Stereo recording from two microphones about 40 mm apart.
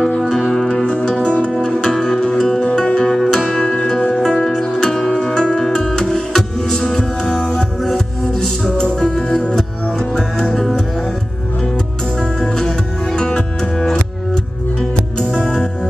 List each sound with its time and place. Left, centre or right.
0.3 s music: centre
3.1 s music: centre
3.6 s music: centre
8.6 s music: centre
10.5 s music: centre
12.4 s music: centre
15.1 s music: centre